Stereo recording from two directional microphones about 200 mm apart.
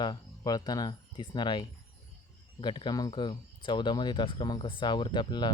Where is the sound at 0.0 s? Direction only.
20° left (ahead or behind).